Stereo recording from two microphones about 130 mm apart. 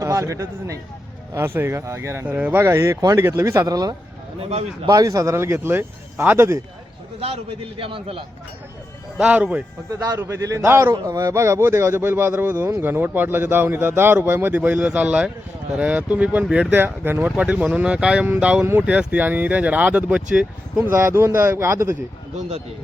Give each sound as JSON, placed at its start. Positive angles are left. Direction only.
{"t": 0.0, "sound": "speech", "side_deg": -25}
{"t": 4.4, "sound": "speech", "side_deg": -55}
{"t": 4.9, "sound": "speech", "side_deg": -25}
{"t": 7.8, "sound": "a man's voice", "side_deg": -45}
{"t": 9.1, "sound": "speech", "side_deg": -10}
{"t": 20.9, "sound": "speech", "side_deg": -20}
{"t": 22.4, "sound": "a man's voice", "side_deg": -50}